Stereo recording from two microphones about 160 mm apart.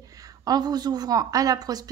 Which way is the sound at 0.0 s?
20° right (ahead or behind).